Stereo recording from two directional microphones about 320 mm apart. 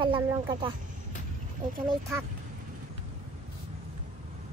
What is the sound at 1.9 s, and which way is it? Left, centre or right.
Speech, centre.